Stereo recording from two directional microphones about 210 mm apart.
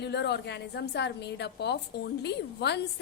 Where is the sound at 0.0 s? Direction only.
55° left (ahead or behind).